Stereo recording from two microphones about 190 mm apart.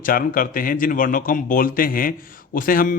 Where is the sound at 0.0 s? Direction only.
45° left (ahead or behind).